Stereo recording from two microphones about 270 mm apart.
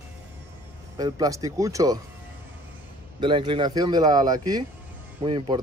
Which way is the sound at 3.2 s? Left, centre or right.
Centre.